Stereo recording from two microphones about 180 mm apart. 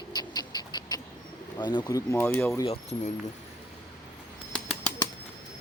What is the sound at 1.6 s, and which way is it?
Speech, 25° left (ahead or behind).